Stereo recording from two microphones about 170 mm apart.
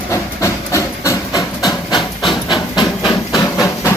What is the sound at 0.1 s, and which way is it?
Hammer, 15° left (ahead or behind).